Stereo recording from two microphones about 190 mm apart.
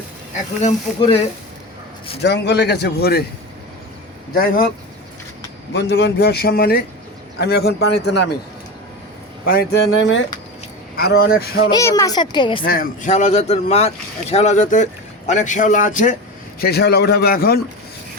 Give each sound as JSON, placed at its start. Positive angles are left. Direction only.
{"t": 0.9, "sound": "speech", "side_deg": 25}
{"t": 2.2, "sound": "speech", "side_deg": 60}
{"t": 4.4, "sound": "speech", "side_deg": 50}
{"t": 5.7, "sound": "speech", "side_deg": 65}
{"t": 9.5, "sound": "speech", "side_deg": 50}
{"t": 9.9, "sound": "speech", "side_deg": 85}
{"t": 10.9, "sound": "speech", "side_deg": 55}
{"t": 11.6, "sound": "speech", "side_deg": 20}
{"t": 12.6, "sound": "speech", "side_deg": 50}
{"t": 16.6, "sound": "speech", "side_deg": 55}